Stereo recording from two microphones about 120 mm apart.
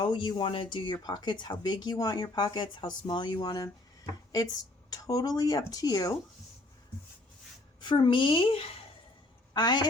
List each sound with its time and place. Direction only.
0.0 s speech: 40° left (ahead or behind)
4.9 s speech: 30° left (ahead or behind)
7.8 s speech: 40° left (ahead or behind)
9.5 s a woman's voice: 35° left (ahead or behind)